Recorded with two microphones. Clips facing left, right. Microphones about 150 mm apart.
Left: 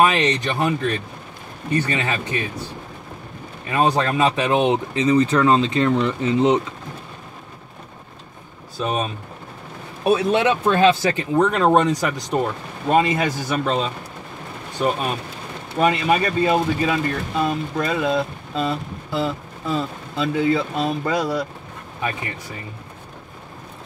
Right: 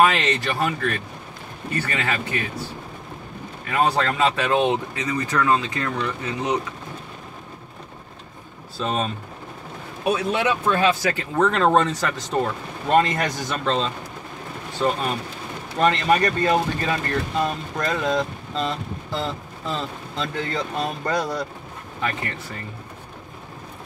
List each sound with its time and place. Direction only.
0.0 s speech: 15° left (ahead or behind)
3.6 s speech: 20° left (ahead or behind)
8.7 s speech: 15° left (ahead or behind)
10.1 s speech: 25° left (ahead or behind); by 21.5 s 10° left (ahead or behind)